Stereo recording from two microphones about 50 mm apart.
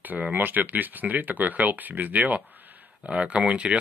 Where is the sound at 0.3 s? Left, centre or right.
Right.